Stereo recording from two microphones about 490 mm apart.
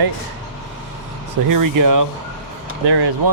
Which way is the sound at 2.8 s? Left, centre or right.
Right.